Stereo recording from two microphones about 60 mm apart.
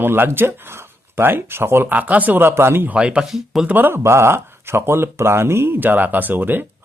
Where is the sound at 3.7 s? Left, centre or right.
Right.